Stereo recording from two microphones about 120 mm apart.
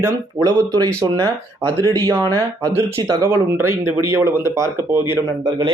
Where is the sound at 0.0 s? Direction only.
30° right (ahead or behind).